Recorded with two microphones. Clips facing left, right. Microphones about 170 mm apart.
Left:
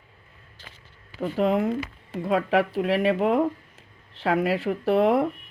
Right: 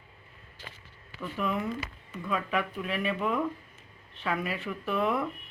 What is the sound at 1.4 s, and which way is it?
Speech, 85° left.